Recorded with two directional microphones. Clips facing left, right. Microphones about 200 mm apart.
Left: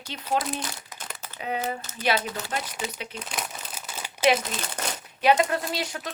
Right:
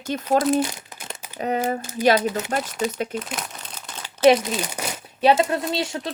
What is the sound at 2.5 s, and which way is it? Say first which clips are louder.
Speech: right 7 dB; 50° right (ahead or behind).